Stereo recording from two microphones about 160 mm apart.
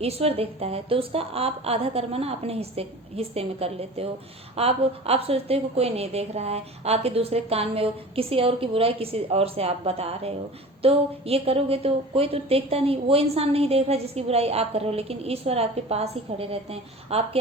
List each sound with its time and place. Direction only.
0.0 s a woman's voice: 40° right (ahead or behind)